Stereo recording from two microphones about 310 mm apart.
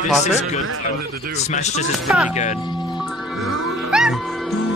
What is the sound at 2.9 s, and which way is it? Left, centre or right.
Music, centre.